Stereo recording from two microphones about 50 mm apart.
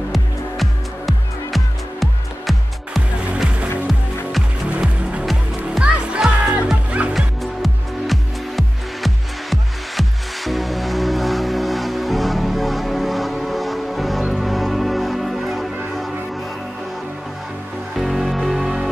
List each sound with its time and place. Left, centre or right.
0.1 s music: centre
4.6 s music: right
5.8 s music: centre
7.2 s music: centre
17.9 s music: centre